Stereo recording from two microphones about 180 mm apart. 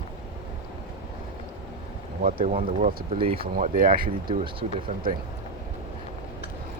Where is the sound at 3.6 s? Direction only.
50° right (ahead or behind).